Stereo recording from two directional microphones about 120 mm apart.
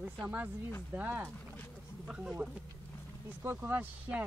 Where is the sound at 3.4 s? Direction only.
15° right (ahead or behind).